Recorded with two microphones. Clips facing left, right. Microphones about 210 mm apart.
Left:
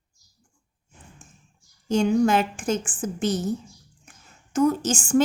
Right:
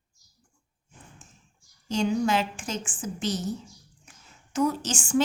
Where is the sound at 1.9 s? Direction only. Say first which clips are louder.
Left 5 dB; 50° left (ahead or behind).